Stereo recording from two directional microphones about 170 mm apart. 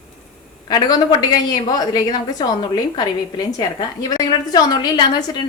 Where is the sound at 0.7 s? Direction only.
25° left (ahead or behind).